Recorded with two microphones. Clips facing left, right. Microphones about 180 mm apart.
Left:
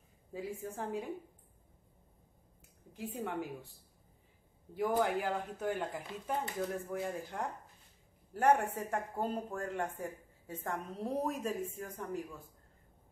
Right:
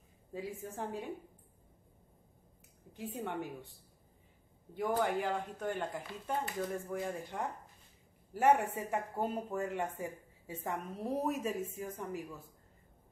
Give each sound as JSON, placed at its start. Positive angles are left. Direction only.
{"t": 0.3, "sound": "speech", "side_deg": 0}
{"t": 2.9, "sound": "speech", "side_deg": 0}
{"t": 4.7, "sound": "speech", "side_deg": 0}